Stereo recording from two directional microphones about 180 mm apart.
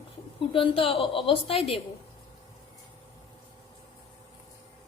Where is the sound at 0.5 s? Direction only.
30° left (ahead or behind).